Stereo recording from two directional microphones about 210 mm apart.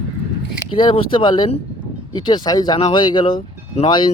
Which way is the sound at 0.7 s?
25° left (ahead or behind).